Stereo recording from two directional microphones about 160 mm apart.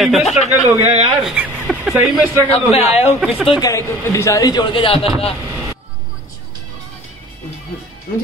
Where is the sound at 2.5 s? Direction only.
40° left (ahead or behind).